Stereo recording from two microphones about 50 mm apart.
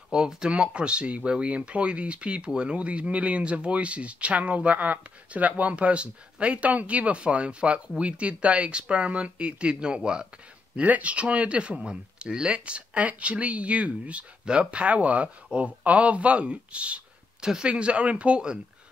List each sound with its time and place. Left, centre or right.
0.1 s speech: centre